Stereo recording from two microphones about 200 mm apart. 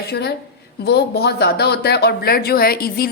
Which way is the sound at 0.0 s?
55° left (ahead or behind).